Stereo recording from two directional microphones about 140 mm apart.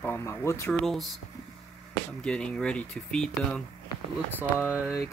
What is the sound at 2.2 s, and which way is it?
Speech, 5° left (ahead or behind).